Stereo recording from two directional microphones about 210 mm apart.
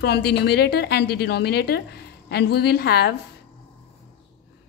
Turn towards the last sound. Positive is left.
turn(degrees=50)  # may be behind; listen again after turning